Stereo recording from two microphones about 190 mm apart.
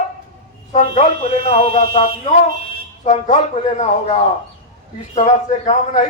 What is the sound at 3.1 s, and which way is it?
A man's voice, 40° left (ahead or behind).